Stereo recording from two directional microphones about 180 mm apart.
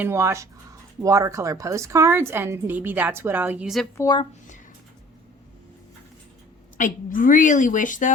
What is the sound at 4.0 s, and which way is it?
Speech, 25° left (ahead or behind).